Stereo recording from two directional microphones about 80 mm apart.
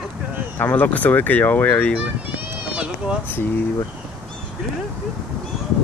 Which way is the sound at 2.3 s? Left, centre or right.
Centre.